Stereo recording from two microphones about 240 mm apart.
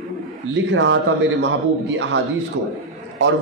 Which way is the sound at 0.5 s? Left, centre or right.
Right.